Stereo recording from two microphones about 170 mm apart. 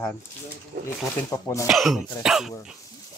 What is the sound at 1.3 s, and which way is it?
Speech, 20° left (ahead or behind).